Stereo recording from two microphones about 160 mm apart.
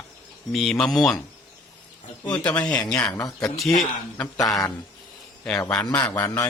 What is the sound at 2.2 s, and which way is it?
A man's voice, 10° left (ahead or behind).